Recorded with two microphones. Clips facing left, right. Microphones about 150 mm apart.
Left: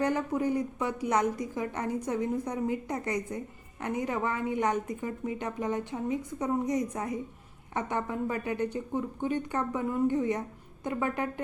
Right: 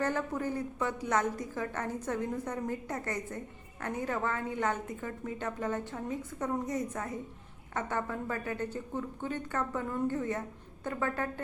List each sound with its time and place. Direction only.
0.0 s a woman's voice: 15° left (ahead or behind)